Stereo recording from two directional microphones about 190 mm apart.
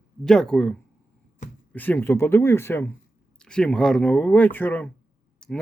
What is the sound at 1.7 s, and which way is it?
Speech, 10° left (ahead or behind).